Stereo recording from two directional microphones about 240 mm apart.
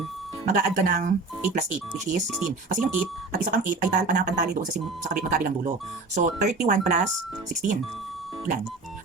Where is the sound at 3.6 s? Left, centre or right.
Right.